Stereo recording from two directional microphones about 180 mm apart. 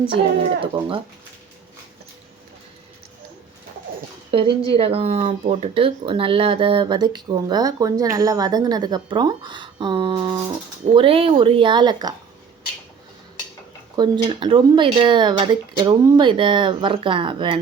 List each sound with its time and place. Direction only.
0.6 s speech: 30° right (ahead or behind)
4.3 s speech: 30° right (ahead or behind)
13.9 s speech: 25° right (ahead or behind)